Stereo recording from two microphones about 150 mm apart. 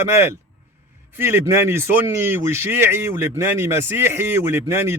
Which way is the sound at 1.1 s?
15° right (ahead or behind).